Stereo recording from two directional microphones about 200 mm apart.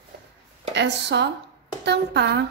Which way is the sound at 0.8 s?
60° right (ahead or behind).